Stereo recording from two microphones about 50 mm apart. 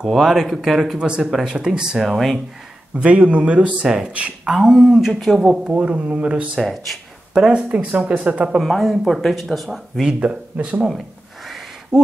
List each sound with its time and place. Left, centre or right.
0.0 s speech: centre
0.9 s speech: right
2.0 s speech: centre
3.0 s speech: right
4.5 s speech: centre
5.7 s speech: right
6.6 s speech: centre
7.3 s speech: centre
7.6 s speech: right
8.6 s speech: centre
10.5 s speech: right
11.9 s speech: centre